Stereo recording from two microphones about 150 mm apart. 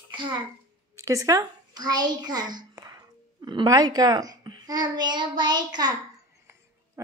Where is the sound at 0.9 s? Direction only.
20° right (ahead or behind).